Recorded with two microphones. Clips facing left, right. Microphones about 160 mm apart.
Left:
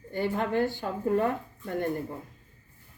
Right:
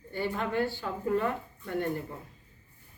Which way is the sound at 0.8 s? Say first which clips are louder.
Left 3 dB; 40° left (ahead or behind).